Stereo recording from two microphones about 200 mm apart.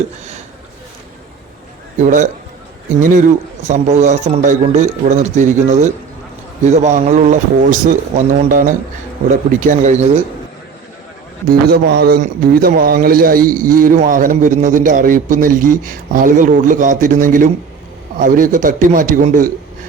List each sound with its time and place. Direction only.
2.0 s speech: 40° right (ahead or behind)
11.7 s a man's voice: 50° right (ahead or behind)